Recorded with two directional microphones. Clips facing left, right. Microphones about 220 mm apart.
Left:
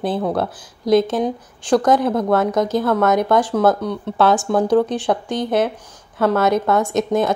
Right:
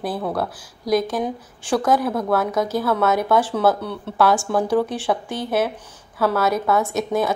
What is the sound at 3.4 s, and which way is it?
Speech, 15° left (ahead or behind).